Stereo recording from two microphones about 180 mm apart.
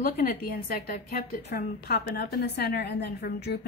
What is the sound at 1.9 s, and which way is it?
A woman's voice, 65° left (ahead or behind).